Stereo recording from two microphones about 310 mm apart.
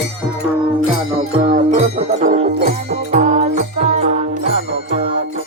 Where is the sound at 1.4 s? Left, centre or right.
Right.